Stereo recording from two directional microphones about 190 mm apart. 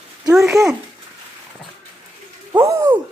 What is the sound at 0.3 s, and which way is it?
Speech, centre (ahead or behind).